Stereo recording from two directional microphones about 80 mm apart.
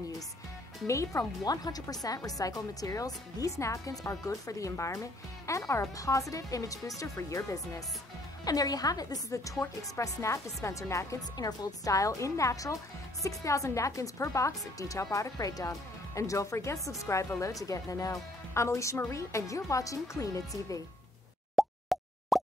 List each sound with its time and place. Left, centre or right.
0.8 s speech: left
1.4 s speech: left
8.5 s speech: left
11.3 s speech: left
21.5 s plop: centre